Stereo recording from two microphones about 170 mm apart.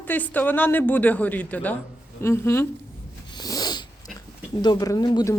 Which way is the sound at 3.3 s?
20° left (ahead or behind).